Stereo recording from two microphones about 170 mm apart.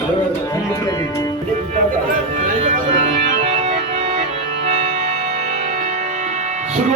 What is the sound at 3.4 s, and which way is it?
Organ, 40° right (ahead or behind).